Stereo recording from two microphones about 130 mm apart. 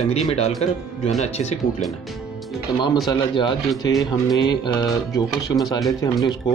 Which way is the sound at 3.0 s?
35° left (ahead or behind).